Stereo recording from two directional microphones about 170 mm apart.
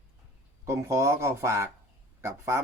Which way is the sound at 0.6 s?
15° right (ahead or behind).